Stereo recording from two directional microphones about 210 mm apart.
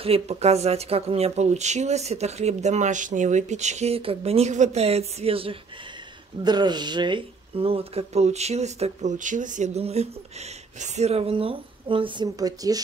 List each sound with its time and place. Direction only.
0.0 s speech: 30° right (ahead or behind)